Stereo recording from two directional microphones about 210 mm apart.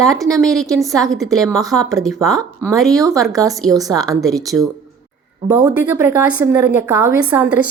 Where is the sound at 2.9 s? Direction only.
15° right (ahead or behind).